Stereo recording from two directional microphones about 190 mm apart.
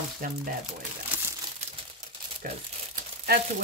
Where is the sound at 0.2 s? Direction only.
45° right (ahead or behind).